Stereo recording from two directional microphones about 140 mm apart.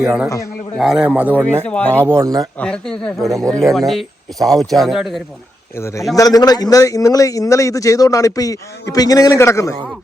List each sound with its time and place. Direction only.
0.0 s speech: 10° right (ahead or behind)
1.0 s speech: 10° right (ahead or behind)
1.6 s speech: 10° left (ahead or behind)
2.0 s speech: 20° right (ahead or behind)
2.6 s speech: 5° left (ahead or behind)
5.7 s a man's voice: 20° left (ahead or behind)